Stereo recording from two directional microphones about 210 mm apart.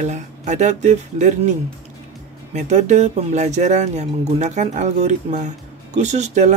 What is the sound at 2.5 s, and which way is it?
Speech, 35° right (ahead or behind).